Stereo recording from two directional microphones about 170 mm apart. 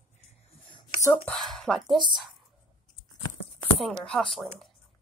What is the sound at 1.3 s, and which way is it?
Speech, centre (ahead or behind).